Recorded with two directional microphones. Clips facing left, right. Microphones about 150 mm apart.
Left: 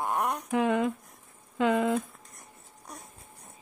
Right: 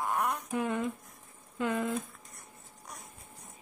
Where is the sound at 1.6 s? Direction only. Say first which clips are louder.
Left 6 dB; 90° left.